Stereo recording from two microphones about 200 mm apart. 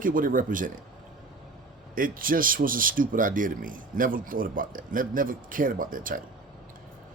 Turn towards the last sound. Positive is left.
turn(degrees=-45)  # may be behind; listen again after turning